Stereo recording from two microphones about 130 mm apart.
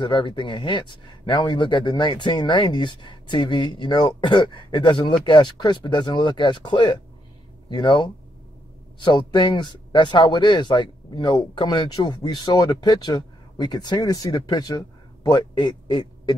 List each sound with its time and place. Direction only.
0.0 s speech: 35° left (ahead or behind)